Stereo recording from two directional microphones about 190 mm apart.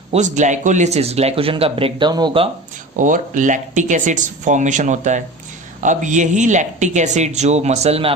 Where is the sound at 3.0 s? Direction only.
40° right (ahead or behind).